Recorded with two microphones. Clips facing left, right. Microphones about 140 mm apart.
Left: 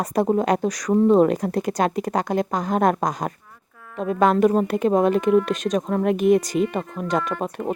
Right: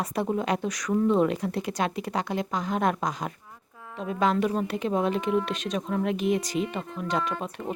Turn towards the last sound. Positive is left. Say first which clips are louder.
# left 5 dB
turn(degrees=45)  # may be behind; listen again after turning